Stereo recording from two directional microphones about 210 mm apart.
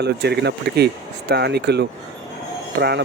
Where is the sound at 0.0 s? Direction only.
50° right (ahead or behind).